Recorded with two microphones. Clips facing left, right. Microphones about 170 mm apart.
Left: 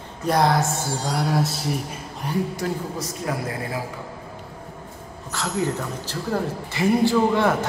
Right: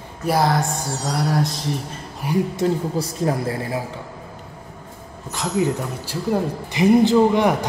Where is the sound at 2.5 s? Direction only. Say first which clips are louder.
Right 6 dB; 30° right (ahead or behind).